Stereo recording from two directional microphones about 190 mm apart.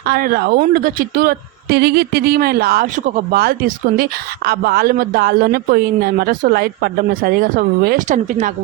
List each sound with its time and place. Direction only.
0.1 s a woman's voice: 50° right (ahead or behind)